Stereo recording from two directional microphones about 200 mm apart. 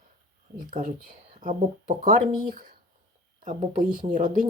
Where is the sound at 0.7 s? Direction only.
45° right (ahead or behind).